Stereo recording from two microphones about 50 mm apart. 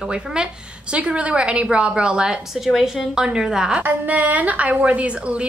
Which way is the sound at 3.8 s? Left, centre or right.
Right.